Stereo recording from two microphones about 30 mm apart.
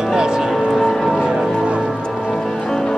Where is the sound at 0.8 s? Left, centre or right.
Centre.